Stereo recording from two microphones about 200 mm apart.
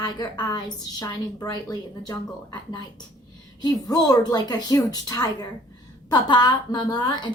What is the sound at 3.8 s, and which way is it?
A woman's voice, 20° left (ahead or behind).